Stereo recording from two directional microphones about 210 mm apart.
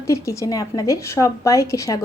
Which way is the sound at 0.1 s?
15° left (ahead or behind).